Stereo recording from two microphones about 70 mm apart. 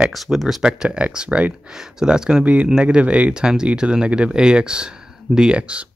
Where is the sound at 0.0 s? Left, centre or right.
Centre.